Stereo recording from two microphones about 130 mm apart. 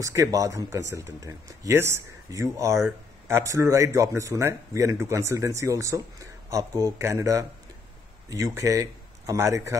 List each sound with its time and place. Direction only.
0.0 s speech: 25° right (ahead or behind)